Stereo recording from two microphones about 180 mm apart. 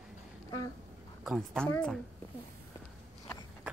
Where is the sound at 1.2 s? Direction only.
Centre (ahead or behind).